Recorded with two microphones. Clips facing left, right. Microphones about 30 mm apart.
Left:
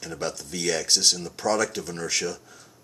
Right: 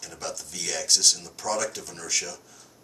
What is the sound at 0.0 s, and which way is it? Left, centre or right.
Speech, centre.